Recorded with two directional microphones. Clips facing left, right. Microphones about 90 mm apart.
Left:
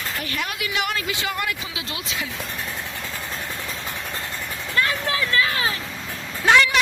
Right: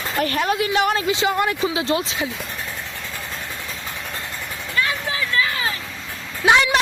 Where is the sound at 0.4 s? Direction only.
30° right (ahead or behind).